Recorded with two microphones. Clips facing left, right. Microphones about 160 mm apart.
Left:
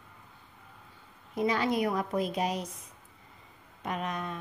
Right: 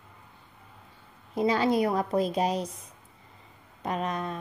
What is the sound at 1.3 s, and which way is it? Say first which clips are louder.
A woman's voice: right 4 dB; 30° right (ahead or behind).